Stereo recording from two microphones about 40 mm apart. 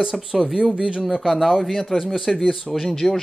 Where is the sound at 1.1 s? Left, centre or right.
Centre.